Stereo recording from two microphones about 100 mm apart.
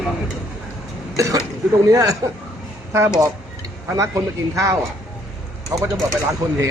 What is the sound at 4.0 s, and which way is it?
Speech, 30° right (ahead or behind).